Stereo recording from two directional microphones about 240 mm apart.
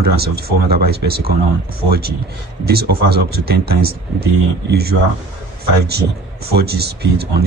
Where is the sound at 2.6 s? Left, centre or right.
Right.